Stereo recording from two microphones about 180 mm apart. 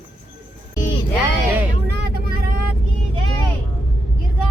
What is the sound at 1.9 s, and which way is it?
Vehicle, 60° right (ahead or behind).